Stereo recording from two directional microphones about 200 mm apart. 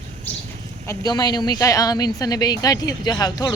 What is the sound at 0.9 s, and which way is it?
A woman's voice, 20° left (ahead or behind).